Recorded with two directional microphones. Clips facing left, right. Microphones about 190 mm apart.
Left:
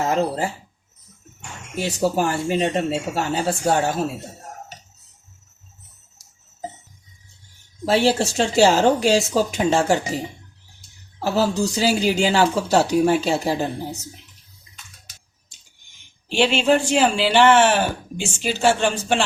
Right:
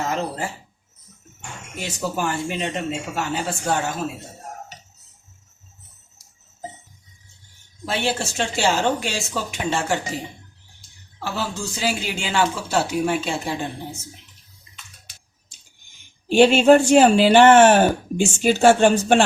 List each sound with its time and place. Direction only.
0.1 s speech: 30° left (ahead or behind)
2.0 s speech: 35° left (ahead or behind)
7.9 s speech: 40° left (ahead or behind)
11.2 s speech: 40° left (ahead or behind)
16.3 s speech: 45° right (ahead or behind)